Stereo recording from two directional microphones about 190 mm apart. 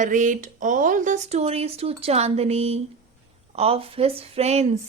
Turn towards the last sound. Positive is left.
turn(degrees=-35)  # may be behind; listen again after turning